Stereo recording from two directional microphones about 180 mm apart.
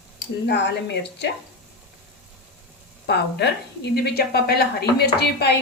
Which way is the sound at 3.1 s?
65° left (ahead or behind).